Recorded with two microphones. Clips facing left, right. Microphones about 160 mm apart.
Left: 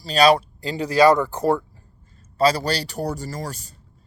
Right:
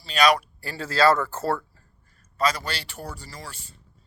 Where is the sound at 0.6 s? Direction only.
15° left (ahead or behind).